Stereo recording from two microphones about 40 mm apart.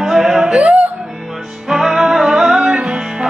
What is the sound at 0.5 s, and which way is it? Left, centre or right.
Music, right.